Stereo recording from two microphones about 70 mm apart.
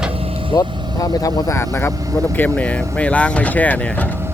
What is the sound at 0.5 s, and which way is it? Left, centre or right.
Speech, left.